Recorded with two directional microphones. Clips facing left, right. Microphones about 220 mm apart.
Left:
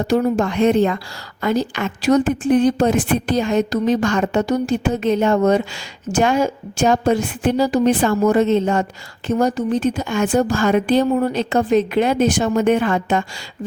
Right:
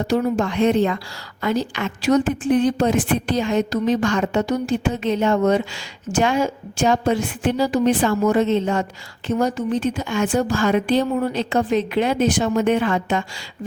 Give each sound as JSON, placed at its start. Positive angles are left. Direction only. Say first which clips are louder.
{"t": 0.1, "sound": "a woman's voice", "louder": "left 3 dB", "side_deg": 45}